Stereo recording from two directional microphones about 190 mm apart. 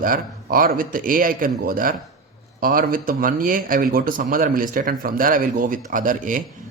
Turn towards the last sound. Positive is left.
turn(degrees=-45)  # may be behind; listen again after turning